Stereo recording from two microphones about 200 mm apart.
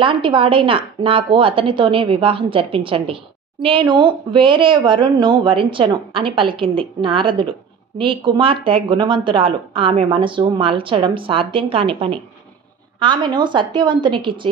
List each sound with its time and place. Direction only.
0.0 s speech: 25° right (ahead or behind)